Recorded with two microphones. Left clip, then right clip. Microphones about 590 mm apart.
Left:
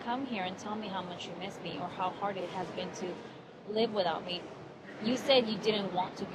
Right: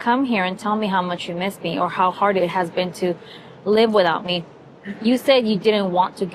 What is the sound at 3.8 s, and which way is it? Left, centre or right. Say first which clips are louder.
A woman's voice: right 13 dB; right.